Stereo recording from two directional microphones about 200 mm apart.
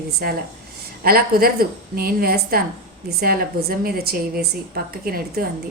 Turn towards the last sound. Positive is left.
turn(degrees=-50)  # may be behind; listen again after turning